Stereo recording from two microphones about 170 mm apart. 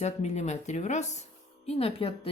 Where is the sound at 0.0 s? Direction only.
40° left (ahead or behind).